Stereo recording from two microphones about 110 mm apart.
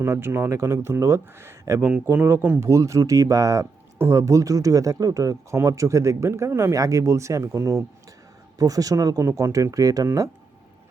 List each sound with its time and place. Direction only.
0.0 s speech: 20° right (ahead or behind)